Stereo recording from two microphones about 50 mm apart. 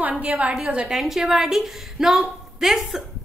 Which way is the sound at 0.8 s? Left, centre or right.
Centre.